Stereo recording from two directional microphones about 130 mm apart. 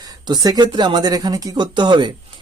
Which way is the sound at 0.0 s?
30° right (ahead or behind).